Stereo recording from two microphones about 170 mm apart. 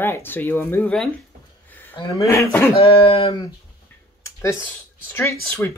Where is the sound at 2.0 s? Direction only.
30° left (ahead or behind).